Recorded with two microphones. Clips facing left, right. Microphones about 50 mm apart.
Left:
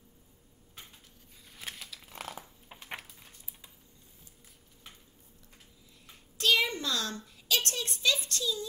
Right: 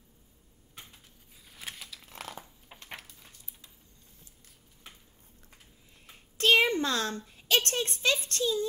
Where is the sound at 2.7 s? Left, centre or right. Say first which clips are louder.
Left 2 dB; centre.